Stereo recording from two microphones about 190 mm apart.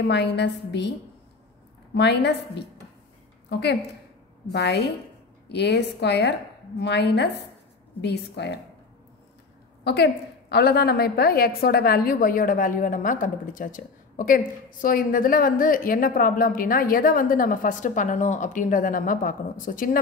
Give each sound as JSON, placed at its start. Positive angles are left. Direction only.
{"t": 0.1, "sound": "a woman's voice", "side_deg": 65}
{"t": 2.0, "sound": "a woman's voice", "side_deg": 60}
{"t": 9.8, "sound": "a woman's voice", "side_deg": 60}